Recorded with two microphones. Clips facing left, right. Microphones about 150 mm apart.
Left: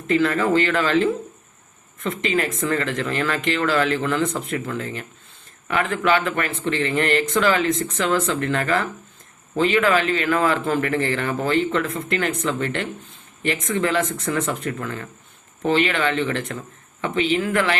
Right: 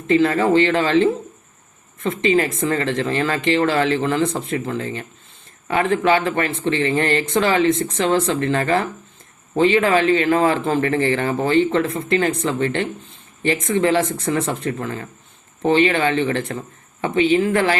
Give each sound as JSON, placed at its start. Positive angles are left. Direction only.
{"t": 0.1, "sound": "speech", "side_deg": -25}
{"t": 2.0, "sound": "speech", "side_deg": -25}